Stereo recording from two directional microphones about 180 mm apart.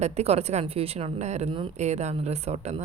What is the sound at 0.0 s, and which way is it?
A woman's voice, 35° right (ahead or behind).